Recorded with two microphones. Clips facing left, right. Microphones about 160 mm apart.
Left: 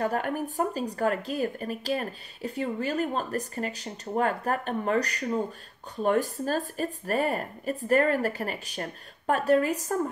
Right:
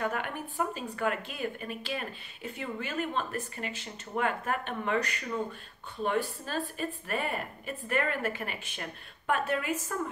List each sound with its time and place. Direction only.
0.0 s a woman's voice: 40° left (ahead or behind)